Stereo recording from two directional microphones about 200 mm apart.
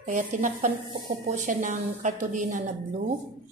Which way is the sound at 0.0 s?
40° right (ahead or behind).